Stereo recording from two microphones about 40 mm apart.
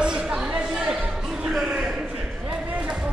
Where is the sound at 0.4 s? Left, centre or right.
Centre.